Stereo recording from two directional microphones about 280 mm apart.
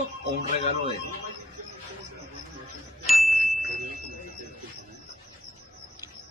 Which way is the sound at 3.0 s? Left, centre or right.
Centre.